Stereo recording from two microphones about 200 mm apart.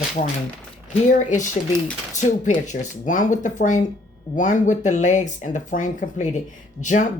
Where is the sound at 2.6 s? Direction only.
40° left (ahead or behind).